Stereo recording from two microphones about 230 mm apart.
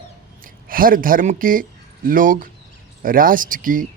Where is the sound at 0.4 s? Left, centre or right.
Right.